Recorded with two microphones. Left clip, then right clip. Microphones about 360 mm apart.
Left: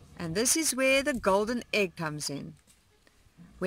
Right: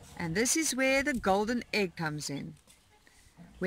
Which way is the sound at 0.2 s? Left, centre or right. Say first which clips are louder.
Left 1 dB; centre.